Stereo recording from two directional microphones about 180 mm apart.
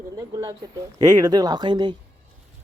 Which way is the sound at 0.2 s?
20° right (ahead or behind).